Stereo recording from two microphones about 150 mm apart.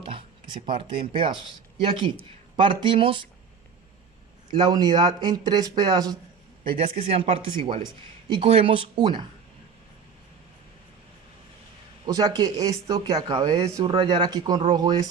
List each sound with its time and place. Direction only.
0.0 s speech: 35° right (ahead or behind)
4.5 s speech: 25° right (ahead or behind)
6.7 s speech: 40° right (ahead or behind)
12.0 s speech: 25° right (ahead or behind)
13.8 s speech: 30° right (ahead or behind)